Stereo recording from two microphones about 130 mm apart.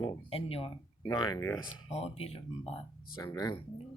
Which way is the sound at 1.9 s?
50° left (ahead or behind).